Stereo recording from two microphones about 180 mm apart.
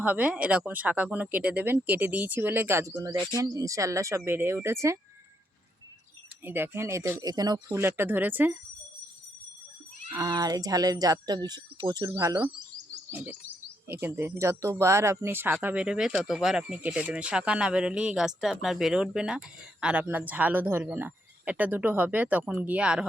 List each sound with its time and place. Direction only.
0.0 s speech: 10° right (ahead or behind)
6.4 s speech: 10° right (ahead or behind)
10.2 s speech: 20° right (ahead or behind)
13.1 s bird: 10° right (ahead or behind)
14.0 s speech: 15° right (ahead or behind)